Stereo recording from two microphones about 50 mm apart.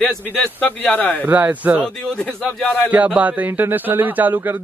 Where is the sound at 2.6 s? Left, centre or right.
Left.